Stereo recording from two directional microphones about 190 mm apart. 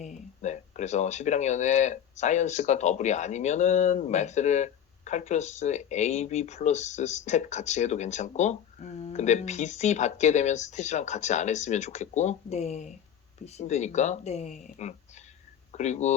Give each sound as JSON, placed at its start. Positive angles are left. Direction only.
{"t": 0.0, "sound": "speech", "side_deg": 40}